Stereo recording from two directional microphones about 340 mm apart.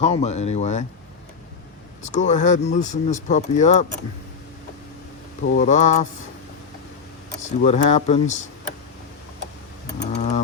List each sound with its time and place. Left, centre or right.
0.0 s speech: centre
2.0 s speech: left
5.4 s speech: left
7.4 s speech: centre
10.1 s a sound: centre